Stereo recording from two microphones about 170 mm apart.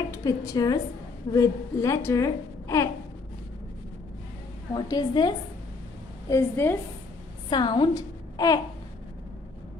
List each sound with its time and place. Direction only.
0.1 s a woman's voice: 20° left (ahead or behind)
4.7 s a woman's voice: 25° left (ahead or behind)
7.4 s a woman's voice: 30° left (ahead or behind)